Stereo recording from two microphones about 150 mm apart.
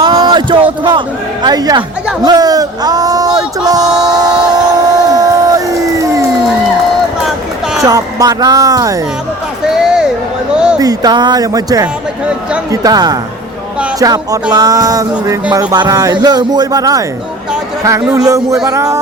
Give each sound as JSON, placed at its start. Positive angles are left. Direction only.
{"t": 0.0, "sound": "a man's voice", "side_deg": -25}
{"t": 5.0, "sound": "crowd", "side_deg": -25}
{"t": 7.2, "sound": "a sound", "side_deg": -5}
{"t": 7.8, "sound": "speech", "side_deg": -25}
{"t": 9.7, "sound": "a sound", "side_deg": -5}
{"t": 10.8, "sound": "speech", "side_deg": -25}
{"t": 12.2, "sound": "speech", "side_deg": -5}
{"t": 12.7, "sound": "speech", "side_deg": -25}
{"t": 18.1, "sound": "speech", "side_deg": -20}